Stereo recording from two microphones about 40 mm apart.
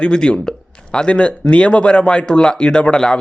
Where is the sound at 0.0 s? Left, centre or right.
Left.